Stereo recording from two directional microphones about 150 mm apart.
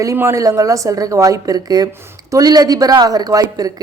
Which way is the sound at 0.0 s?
20° right (ahead or behind).